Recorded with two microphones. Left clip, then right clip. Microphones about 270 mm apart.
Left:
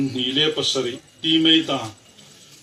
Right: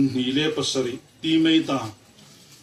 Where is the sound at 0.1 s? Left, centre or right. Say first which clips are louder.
Left 3 dB; right.